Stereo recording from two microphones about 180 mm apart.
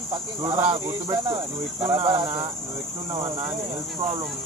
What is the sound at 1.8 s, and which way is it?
Cricket, 25° right (ahead or behind).